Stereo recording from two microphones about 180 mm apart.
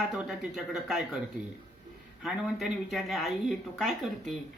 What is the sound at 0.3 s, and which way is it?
Speech, 5° right (ahead or behind).